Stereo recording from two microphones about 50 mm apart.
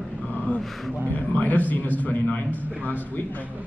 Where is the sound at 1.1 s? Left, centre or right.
Left.